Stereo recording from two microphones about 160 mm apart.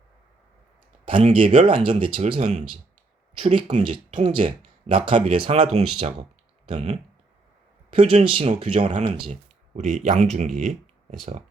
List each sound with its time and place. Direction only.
1.0 s speech: 35° right (ahead or behind)
2.4 s speech: 45° right (ahead or behind)
3.3 s speech: 30° right (ahead or behind)
9.3 s a sound: 50° right (ahead or behind)
10.2 s speech: 45° right (ahead or behind)